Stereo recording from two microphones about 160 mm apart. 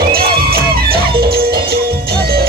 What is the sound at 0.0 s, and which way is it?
Music, 70° right (ahead or behind).